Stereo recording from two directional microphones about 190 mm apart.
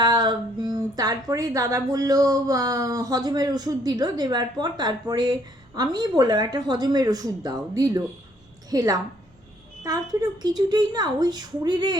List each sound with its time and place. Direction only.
0.0 s speech: 25° right (ahead or behind)